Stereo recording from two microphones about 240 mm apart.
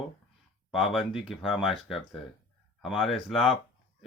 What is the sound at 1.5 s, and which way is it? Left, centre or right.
Speech, centre.